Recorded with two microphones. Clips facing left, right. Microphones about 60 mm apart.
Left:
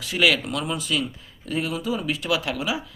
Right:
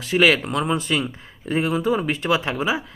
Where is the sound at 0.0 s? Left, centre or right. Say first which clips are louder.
Right 4 dB; right.